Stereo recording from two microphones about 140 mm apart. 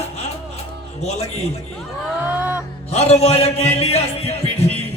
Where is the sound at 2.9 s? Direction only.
50° left (ahead or behind).